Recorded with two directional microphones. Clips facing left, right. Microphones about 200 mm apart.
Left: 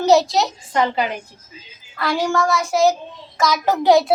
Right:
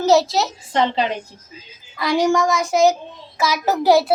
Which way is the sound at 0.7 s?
30° right (ahead or behind).